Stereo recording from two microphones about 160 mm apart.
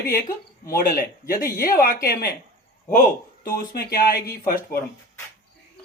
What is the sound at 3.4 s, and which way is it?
Speech, 70° left (ahead or behind).